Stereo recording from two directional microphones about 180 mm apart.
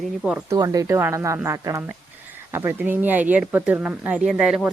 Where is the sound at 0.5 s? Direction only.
20° right (ahead or behind).